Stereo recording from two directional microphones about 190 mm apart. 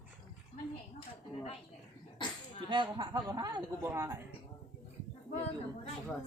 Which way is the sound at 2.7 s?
25° right (ahead or behind).